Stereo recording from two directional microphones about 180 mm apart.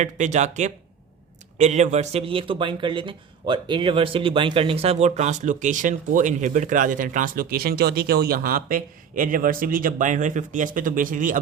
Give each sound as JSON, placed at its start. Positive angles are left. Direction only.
{"t": 0.0, "sound": "speech", "side_deg": -40}